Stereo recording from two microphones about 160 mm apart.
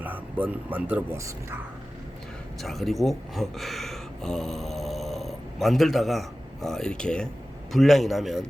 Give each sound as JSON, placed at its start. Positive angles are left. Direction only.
{"t": 0.0, "sound": "speech", "side_deg": -10}
{"t": 2.6, "sound": "a man's voice", "side_deg": 0}